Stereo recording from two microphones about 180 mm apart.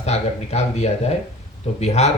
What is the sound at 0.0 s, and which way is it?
Speech, 35° left (ahead or behind).